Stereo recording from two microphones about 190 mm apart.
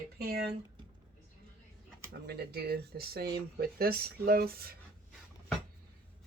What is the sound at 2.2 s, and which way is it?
Speech, 55° right (ahead or behind).